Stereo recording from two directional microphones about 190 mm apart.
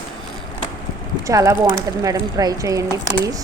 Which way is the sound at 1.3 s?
15° right (ahead or behind).